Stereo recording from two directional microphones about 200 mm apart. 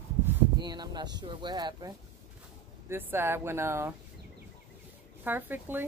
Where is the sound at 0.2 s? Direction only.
20° right (ahead or behind).